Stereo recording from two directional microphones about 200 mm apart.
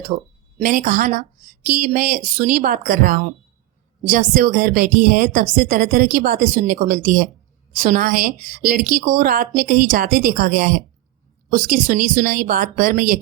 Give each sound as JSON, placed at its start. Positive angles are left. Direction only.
{"t": 0.1, "sound": "speech", "side_deg": -35}